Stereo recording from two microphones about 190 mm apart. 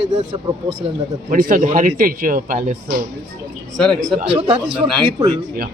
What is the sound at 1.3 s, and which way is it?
A man's voice, 45° right (ahead or behind).